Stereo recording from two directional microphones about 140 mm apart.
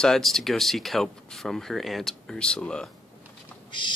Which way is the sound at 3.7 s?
35° left (ahead or behind).